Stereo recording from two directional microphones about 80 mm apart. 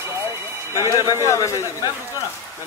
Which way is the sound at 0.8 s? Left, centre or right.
Left.